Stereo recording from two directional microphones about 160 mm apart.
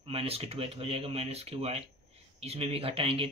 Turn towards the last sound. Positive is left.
turn(degrees=-35)  # may be behind; listen again after turning